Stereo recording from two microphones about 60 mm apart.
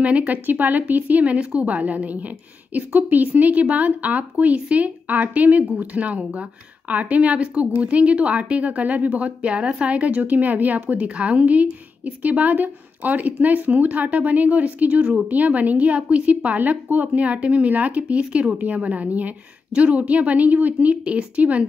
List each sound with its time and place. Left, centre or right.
0.0 s speech: right